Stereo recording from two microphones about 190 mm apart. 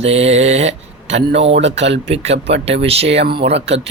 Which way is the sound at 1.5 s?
70° right (ahead or behind).